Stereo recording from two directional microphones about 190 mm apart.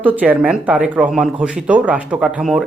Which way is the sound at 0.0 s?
10° right (ahead or behind).